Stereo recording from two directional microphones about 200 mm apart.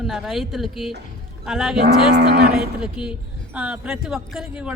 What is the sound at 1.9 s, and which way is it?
Cattle, 55° right (ahead or behind).